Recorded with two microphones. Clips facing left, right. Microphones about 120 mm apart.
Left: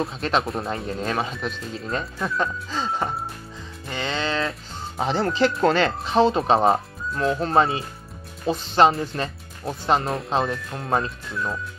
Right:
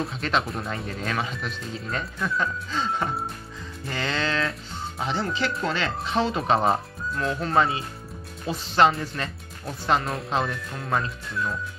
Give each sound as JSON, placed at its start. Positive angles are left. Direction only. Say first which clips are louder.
{"t": 0.0, "sound": "speech", "louder": "left 3 dB", "side_deg": 30}
{"t": 3.9, "sound": "music", "louder": "left 1 dB", "side_deg": 25}
{"t": 5.6, "sound": "speech", "louder": "left 8 dB", "side_deg": 55}
{"t": 6.1, "sound": "speech", "louder": "left 5 dB", "side_deg": 30}